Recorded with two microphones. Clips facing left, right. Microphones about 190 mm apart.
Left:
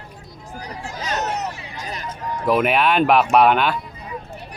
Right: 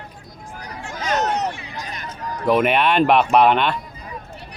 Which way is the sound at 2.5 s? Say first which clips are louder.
Right 1 dB; centre (ahead or behind).